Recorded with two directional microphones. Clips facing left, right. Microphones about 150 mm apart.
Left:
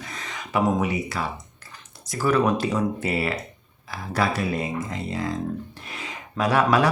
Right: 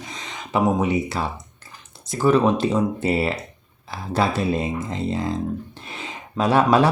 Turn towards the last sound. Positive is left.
turn(degrees=-25)  # may be behind; listen again after turning